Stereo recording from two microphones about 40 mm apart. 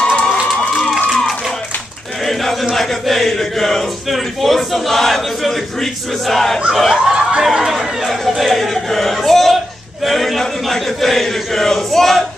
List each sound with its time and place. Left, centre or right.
0.0 s crowd: left
2.7 s speech: centre
6.2 s choir: centre
6.7 s speech: centre
7.2 s a sound: centre
8.3 s speech: centre
10.4 s choir: centre